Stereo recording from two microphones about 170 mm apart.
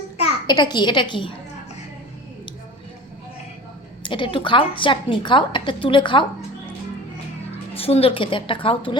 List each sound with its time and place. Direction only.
0.4 s a woman's voice: 25° left (ahead or behind)
4.0 s a woman's voice: 30° left (ahead or behind)
7.7 s a woman's voice: 35° left (ahead or behind)